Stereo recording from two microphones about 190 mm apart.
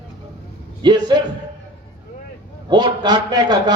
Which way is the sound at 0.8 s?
20° right (ahead or behind).